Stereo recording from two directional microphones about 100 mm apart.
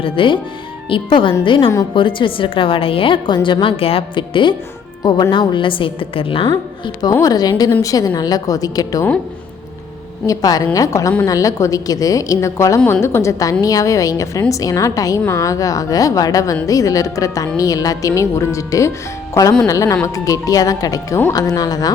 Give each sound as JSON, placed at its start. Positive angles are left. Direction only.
{"t": 0.0, "sound": "a woman's voice", "side_deg": 60}
{"t": 7.1, "sound": "a woman's voice", "side_deg": 35}
{"t": 10.2, "sound": "a woman's voice", "side_deg": 40}